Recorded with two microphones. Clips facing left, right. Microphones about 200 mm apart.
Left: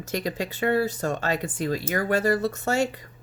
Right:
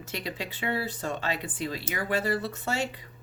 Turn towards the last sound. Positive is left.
turn(degrees=45)  # may be behind; listen again after turning